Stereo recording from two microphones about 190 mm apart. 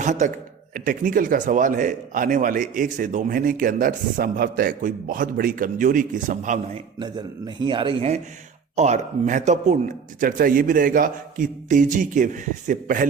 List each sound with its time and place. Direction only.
0.0 s a man's voice: 40° right (ahead or behind)
7.0 s a man's voice: 25° right (ahead or behind); by 13.1 s 45° right (ahead or behind)